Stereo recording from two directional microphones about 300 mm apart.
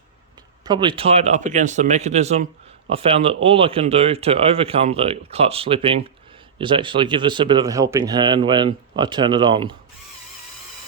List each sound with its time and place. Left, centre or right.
0.6 s speech: centre